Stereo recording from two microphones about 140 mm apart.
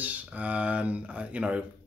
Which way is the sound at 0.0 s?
10° right (ahead or behind).